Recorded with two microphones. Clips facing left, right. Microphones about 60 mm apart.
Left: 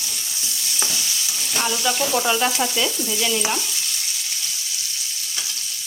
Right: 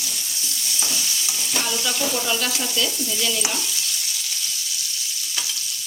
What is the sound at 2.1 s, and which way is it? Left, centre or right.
Frying, left.